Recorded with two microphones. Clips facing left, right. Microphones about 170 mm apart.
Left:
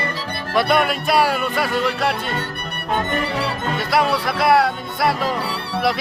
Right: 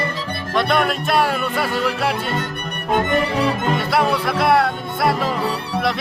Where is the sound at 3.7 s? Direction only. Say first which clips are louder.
Even; centre (ahead or behind).